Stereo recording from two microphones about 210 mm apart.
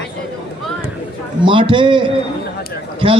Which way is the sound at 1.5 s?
25° right (ahead or behind).